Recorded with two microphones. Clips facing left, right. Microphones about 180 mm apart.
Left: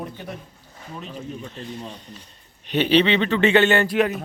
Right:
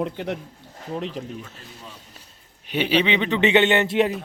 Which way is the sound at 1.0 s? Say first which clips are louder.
Right 4 dB; 90° right.